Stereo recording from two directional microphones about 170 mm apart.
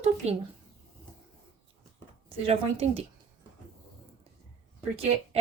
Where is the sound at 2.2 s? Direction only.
35° right (ahead or behind).